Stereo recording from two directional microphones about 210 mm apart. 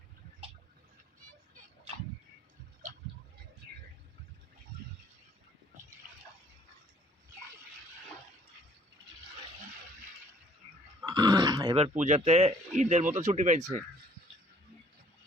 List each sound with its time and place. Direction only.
11.0 s speech: 20° right (ahead or behind); by 13.6 s 35° right (ahead or behind)